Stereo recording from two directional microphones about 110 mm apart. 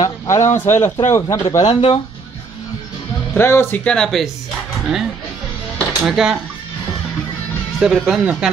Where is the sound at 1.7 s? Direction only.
50° left (ahead or behind).